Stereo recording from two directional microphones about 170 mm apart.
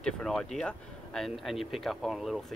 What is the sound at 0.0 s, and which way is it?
Speech, 5° left (ahead or behind).